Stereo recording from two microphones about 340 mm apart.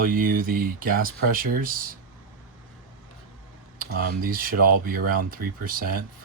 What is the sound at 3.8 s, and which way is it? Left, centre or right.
Speech, right.